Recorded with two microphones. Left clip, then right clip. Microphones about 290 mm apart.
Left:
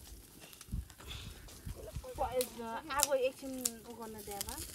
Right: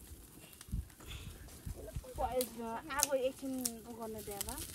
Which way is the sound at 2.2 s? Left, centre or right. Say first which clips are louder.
Left 1 dB; centre.